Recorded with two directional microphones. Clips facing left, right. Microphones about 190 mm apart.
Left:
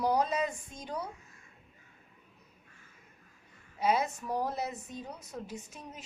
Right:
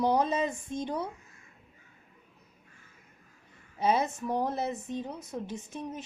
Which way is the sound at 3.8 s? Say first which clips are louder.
Right 2 dB; 30° right (ahead or behind).